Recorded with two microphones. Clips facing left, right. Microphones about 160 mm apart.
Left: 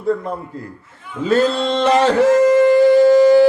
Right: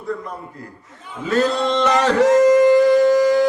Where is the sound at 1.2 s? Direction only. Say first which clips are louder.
Left 3 dB; 30° left (ahead or behind).